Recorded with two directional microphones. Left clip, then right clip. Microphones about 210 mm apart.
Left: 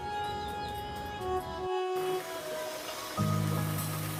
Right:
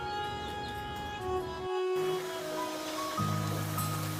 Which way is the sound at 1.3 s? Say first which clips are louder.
Left 1 dB; centre (ahead or behind).